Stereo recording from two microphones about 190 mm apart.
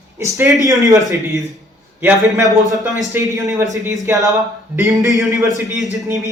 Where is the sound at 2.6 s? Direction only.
20° right (ahead or behind).